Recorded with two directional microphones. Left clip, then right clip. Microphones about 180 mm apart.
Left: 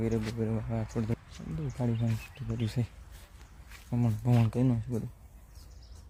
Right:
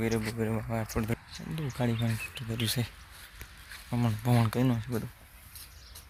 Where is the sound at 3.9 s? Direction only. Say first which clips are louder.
Right 2 dB; 5° right (ahead or behind).